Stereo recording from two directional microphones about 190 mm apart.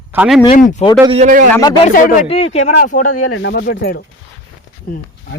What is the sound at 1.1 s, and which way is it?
Speech, 45° right (ahead or behind).